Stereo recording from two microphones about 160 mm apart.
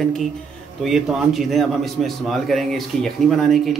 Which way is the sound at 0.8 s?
5° right (ahead or behind).